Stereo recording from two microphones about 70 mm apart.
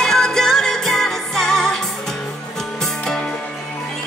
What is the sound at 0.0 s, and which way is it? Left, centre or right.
Music, centre.